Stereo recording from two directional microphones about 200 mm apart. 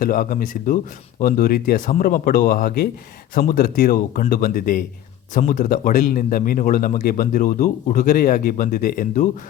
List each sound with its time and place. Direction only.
0.0 s a man's voice: 45° left (ahead or behind)